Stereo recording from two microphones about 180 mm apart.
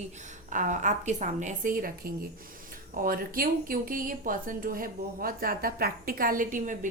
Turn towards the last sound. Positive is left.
turn(degrees=-45)  # may be behind; listen again after turning